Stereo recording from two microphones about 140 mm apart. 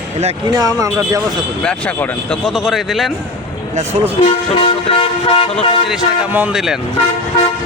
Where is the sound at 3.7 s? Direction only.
50° right (ahead or behind).